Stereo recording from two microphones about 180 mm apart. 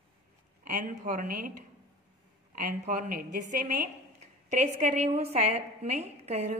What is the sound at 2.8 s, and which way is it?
A woman's voice, 45° right (ahead or behind).